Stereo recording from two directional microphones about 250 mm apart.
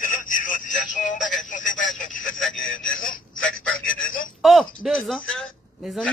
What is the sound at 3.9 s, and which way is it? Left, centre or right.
Telephone, left.